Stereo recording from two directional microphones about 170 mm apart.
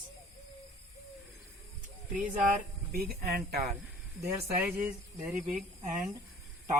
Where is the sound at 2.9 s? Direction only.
65° right (ahead or behind).